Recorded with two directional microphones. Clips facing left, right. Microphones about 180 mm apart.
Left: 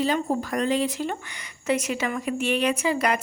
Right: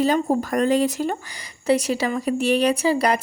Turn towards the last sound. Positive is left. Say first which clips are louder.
# right 4 dB
turn(degrees=-35)  # may be behind; listen again after turning